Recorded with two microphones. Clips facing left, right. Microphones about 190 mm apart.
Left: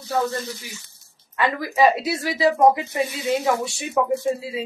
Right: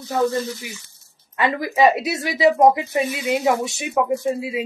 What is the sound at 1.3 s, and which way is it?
Speech, 20° right (ahead or behind).